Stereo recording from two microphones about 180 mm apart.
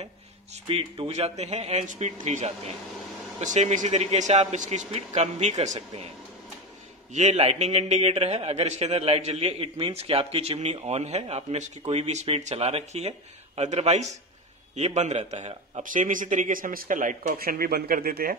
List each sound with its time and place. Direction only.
0.7 s a man's voice: 30° right (ahead or behind)
7.2 s a man's voice: 40° right (ahead or behind); by 18.3 s 55° right (ahead or behind)